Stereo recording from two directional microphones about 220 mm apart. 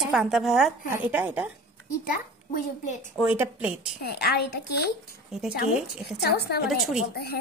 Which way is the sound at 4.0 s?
45° left (ahead or behind).